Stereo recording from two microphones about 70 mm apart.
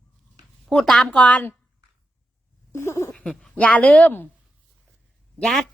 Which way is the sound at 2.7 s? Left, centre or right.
Left.